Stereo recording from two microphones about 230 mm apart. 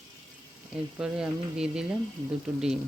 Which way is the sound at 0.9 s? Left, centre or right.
Centre.